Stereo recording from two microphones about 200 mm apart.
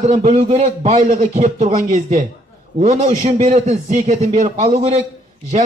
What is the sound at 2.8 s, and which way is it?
A man's voice, 35° right (ahead or behind).